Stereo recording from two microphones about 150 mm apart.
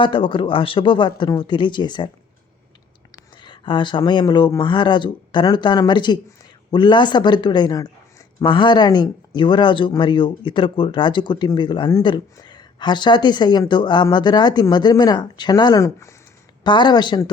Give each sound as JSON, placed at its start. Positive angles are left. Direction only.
{"t": 0.0, "sound": "speech", "side_deg": 35}
{"t": 3.4, "sound": "speech", "side_deg": 35}
{"t": 16.6, "sound": "speech", "side_deg": 30}